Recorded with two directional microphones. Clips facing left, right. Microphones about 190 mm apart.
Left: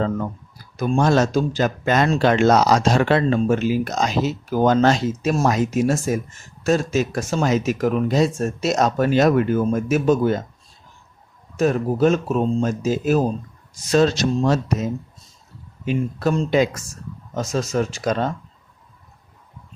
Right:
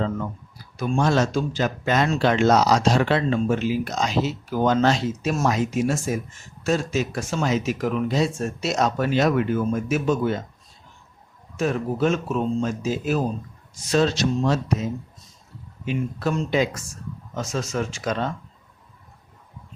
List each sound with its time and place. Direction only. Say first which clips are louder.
0.8 s speech: left 3 dB; 45° left (ahead or behind)
11.5 s speech: left 5 dB; 40° left (ahead or behind)
15.9 s speech: left 4 dB; 35° left (ahead or behind)